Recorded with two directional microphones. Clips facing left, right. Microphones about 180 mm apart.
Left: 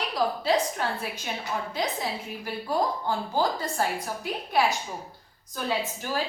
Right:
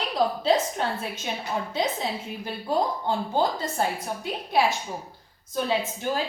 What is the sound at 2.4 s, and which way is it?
A woman's voice, 25° right (ahead or behind).